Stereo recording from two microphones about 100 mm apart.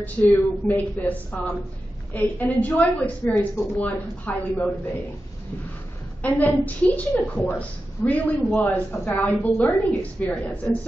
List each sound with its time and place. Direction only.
0.0 s a woman's voice: 15° left (ahead or behind)
6.2 s a woman's voice: 15° left (ahead or behind)